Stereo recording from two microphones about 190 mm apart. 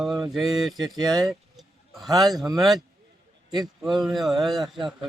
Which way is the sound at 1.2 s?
Centre (ahead or behind).